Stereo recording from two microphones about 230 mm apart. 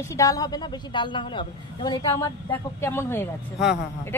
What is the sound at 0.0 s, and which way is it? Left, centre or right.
A woman's voice, centre.